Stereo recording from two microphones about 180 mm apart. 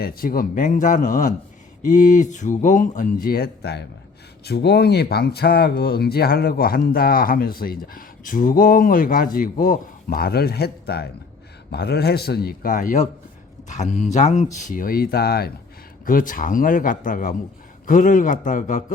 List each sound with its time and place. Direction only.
0.0 s speech: 55° left (ahead or behind)
16.0 s speech: 50° left (ahead or behind)